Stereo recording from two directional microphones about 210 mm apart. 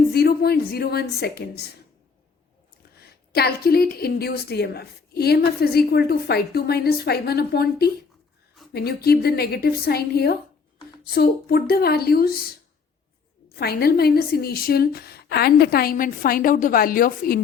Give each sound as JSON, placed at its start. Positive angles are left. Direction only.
{"t": 0.1, "sound": "a woman's voice", "side_deg": 50}
{"t": 3.0, "sound": "a woman's voice", "side_deg": 50}
{"t": 13.6, "sound": "a woman's voice", "side_deg": 50}